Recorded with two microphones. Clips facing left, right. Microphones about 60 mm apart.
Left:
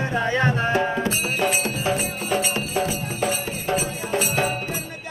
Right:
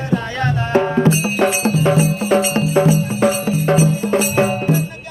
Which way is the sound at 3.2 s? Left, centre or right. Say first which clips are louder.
Right 7 dB; right.